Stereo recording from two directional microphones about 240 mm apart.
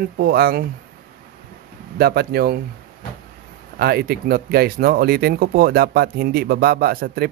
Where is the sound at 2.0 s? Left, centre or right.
Right.